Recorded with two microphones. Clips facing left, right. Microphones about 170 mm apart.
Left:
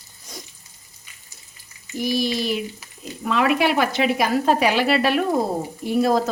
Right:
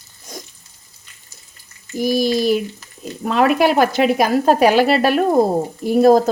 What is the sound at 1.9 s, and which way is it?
A woman's voice, 40° right (ahead or behind).